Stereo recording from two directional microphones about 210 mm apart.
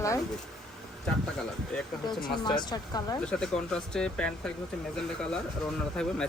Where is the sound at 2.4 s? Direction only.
20° left (ahead or behind).